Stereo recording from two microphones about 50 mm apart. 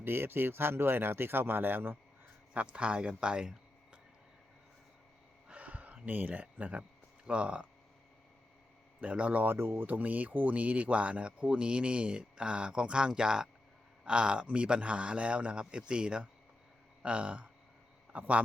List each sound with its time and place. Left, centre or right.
0.0 s speech: right
2.5 s speech: right
5.5 s a sound: right
7.3 s speech: right
9.0 s speech: right
9.5 s speech: right
9.8 s speech: right